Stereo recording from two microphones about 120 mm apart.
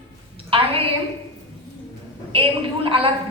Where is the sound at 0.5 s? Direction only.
50° right (ahead or behind).